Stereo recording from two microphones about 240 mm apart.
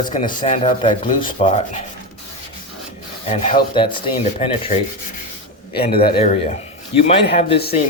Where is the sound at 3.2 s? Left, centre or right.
Left.